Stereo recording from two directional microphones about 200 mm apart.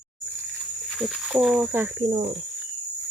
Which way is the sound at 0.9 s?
Centre (ahead or behind).